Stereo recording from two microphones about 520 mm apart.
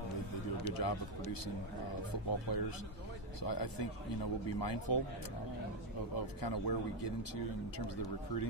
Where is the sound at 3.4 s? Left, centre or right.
Left.